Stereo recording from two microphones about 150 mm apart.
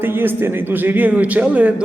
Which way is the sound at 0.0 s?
15° right (ahead or behind).